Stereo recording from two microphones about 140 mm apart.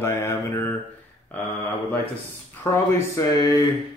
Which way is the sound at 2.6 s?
20° left (ahead or behind).